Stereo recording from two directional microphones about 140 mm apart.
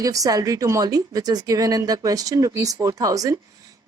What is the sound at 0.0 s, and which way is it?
A woman's voice, 25° right (ahead or behind).